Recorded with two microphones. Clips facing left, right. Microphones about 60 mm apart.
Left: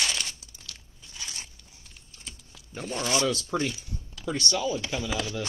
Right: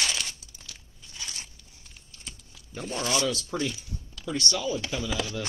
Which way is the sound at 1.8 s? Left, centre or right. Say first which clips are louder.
Even; centre.